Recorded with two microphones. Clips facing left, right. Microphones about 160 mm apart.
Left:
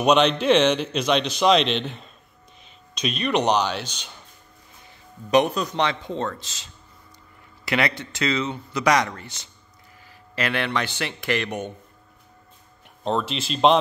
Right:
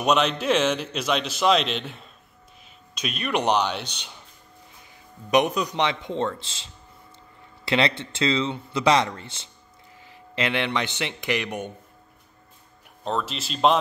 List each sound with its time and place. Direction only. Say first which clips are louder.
0.0 s a man's voice: left 4 dB; centre (ahead or behind)
5.3 s speech: left 1 dB; 15° right (ahead or behind)
13.0 s a man's voice: left 3 dB; centre (ahead or behind)